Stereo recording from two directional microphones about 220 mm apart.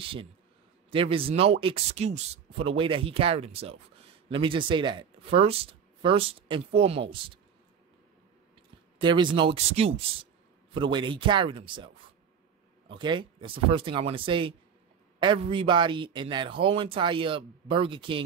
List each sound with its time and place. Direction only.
0.0 s speech: 25° right (ahead or behind)
8.9 s speech: 20° right (ahead or behind)